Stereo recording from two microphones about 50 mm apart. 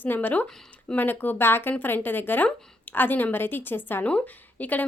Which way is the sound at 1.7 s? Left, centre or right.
Left.